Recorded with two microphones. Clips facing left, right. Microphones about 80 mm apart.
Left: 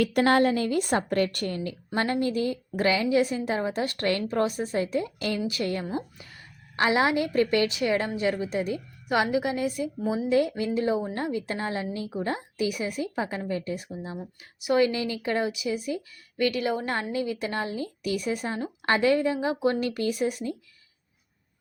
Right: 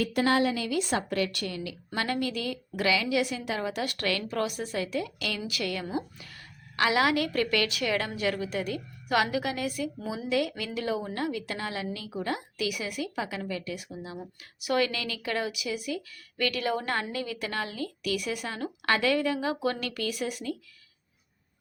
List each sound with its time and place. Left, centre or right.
0.0 s a woman's voice: left
6.1 s chicken: left
6.8 s a woman's voice: left
14.6 s a woman's voice: left